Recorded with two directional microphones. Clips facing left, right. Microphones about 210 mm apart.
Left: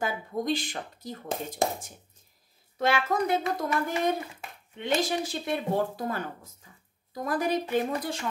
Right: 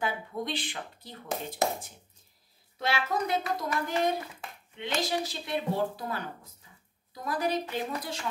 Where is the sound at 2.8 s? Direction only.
50° left (ahead or behind).